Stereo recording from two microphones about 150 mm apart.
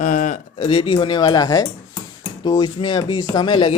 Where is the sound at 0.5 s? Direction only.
35° left (ahead or behind).